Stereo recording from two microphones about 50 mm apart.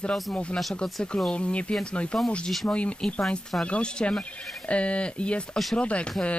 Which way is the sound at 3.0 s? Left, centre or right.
Centre.